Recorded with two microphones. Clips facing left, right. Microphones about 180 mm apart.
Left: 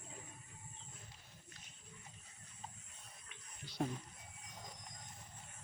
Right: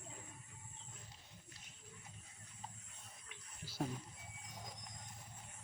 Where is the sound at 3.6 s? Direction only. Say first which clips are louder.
Left 2 dB; 5° right (ahead or behind).